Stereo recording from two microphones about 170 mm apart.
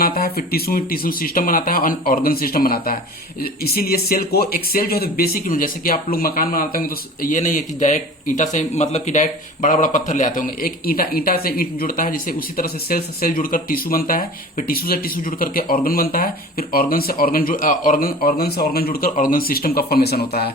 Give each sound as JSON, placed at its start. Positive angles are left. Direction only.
{"t": 0.0, "sound": "speech", "side_deg": 60}